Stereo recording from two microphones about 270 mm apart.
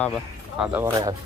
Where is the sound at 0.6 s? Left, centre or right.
Centre.